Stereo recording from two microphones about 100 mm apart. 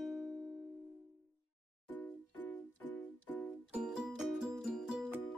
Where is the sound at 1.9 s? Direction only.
20° left (ahead or behind).